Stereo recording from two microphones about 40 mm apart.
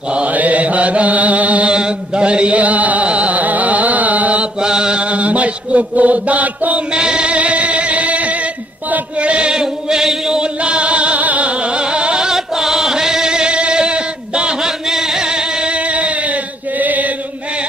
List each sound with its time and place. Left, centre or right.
0.3 s mantra: right
1.7 s chant: right
4.6 s chant: right
5.0 s chant: right
6.9 s music: right
9.2 s chant: right
9.5 s chant: centre
10.4 s music: right
12.3 s chant: centre; by 14.5 s right
14.6 s a sound: centre; by 17.1 s right